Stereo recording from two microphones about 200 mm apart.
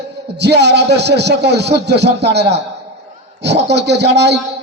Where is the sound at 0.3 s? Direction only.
55° right (ahead or behind).